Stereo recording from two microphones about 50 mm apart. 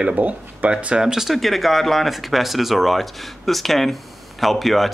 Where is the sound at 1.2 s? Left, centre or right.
Centre.